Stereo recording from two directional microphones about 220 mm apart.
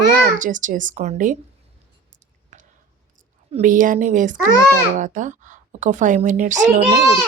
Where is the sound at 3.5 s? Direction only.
30° right (ahead or behind).